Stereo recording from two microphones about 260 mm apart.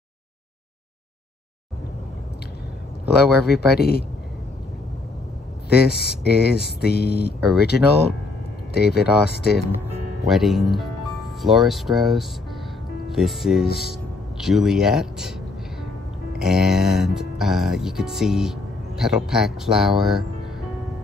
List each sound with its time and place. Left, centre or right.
3.4 s speech: left
5.7 s speech: left
10.2 s speech: centre
16.3 s speech: centre